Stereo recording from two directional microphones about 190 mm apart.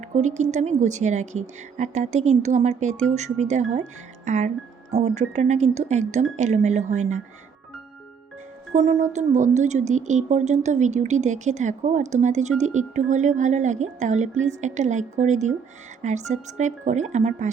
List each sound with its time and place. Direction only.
0.2 s speech: 40° right (ahead or behind)
8.7 s speech: 35° right (ahead or behind)